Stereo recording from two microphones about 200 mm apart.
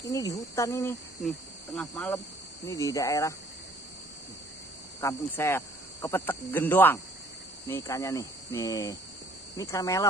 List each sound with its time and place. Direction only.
0.1 s speech: 15° left (ahead or behind)
1.2 s speech: 5° left (ahead or behind)
5.0 s speech: 15° left (ahead or behind)